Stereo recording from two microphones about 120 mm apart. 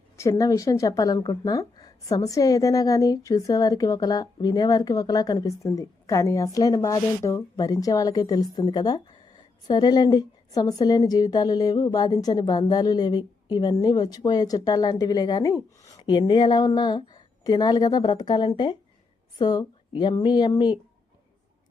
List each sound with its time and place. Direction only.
0.2 s a woman's voice: 25° left (ahead or behind)